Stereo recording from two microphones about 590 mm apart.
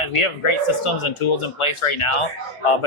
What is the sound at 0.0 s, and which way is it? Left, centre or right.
Speech, left.